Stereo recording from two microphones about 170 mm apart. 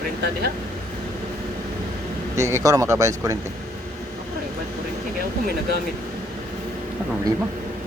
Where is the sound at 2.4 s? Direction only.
15° right (ahead or behind).